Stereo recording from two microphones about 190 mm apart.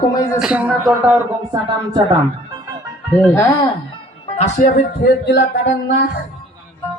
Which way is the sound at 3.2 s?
10° left (ahead or behind).